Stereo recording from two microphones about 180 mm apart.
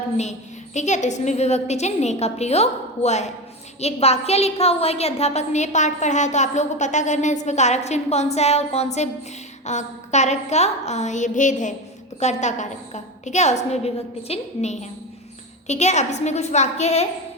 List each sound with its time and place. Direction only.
0.2 s a woman's voice: 40° left (ahead or behind)